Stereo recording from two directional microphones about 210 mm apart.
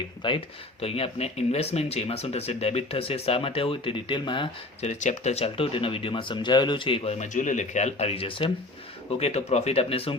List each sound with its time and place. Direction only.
0.2 s speech: 25° left (ahead or behind)